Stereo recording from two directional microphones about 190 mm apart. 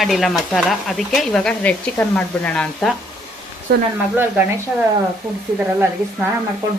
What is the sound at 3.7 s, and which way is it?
Speech, 55° right (ahead or behind).